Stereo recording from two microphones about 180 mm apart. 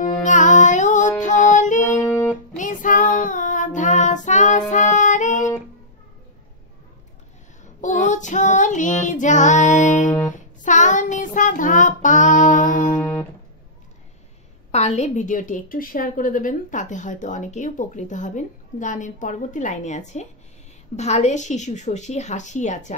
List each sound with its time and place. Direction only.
0.0 s music: 45° left (ahead or behind)
2.0 s music: 15° left (ahead or behind)
2.5 s music: 45° left (ahead or behind)
3.2 s child singing: 45° left (ahead or behind)
4.6 s music: 45° left (ahead or behind)
7.8 s female singing: 40° left (ahead or behind)
10.6 s child singing: 45° left (ahead or behind)
13.0 s music: 10° left (ahead or behind)
14.7 s a woman's voice: 40° left (ahead or behind)